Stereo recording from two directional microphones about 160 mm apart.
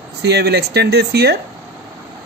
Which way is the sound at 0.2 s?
90° right.